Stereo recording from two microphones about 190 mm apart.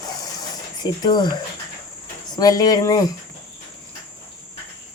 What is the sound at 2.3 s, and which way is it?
Speech, 20° left (ahead or behind).